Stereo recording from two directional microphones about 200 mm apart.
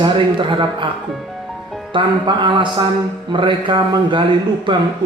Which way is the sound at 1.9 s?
25° right (ahead or behind).